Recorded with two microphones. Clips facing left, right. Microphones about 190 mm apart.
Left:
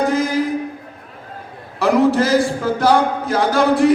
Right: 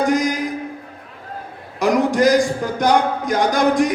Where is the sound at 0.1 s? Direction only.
15° right (ahead or behind).